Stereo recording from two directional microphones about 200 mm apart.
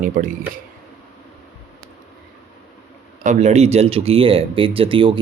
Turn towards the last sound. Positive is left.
turn(degrees=-25)  # may be behind; listen again after turning